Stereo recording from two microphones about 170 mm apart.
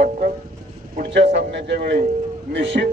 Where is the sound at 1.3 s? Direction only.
90° right.